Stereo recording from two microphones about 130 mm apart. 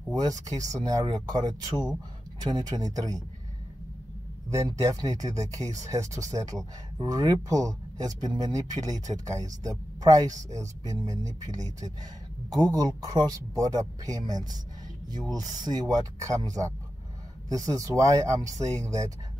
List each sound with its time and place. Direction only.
0.1 s speech: 30° right (ahead or behind)
4.5 s speech: 25° right (ahead or behind)